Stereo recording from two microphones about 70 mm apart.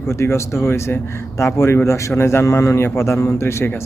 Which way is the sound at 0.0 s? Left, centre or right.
Left.